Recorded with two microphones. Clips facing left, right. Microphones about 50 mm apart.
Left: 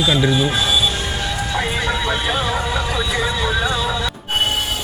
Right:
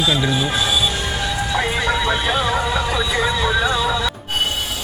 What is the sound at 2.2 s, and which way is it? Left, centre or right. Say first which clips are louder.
Speech: right 1 dB; right.